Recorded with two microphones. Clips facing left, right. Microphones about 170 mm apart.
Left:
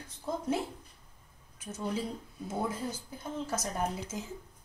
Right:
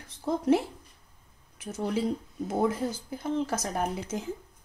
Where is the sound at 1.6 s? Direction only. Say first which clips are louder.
Right 6 dB; 80° right.